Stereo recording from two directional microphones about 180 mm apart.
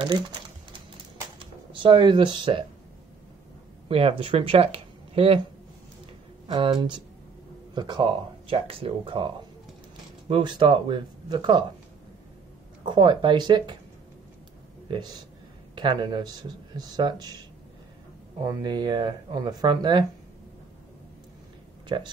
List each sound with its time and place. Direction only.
0.0 s typing: 30° right (ahead or behind)
1.4 s speech: 25° right (ahead or behind)
3.9 s speech: 30° right (ahead or behind)
6.4 s speech: 30° right (ahead or behind)
12.8 s speech: 25° right (ahead or behind)
14.9 s speech: 25° right (ahead or behind)
18.4 s speech: 20° right (ahead or behind)
21.8 s speech: 25° right (ahead or behind)